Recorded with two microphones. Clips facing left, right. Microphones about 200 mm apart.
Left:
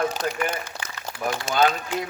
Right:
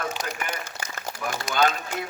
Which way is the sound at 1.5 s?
45° left (ahead or behind).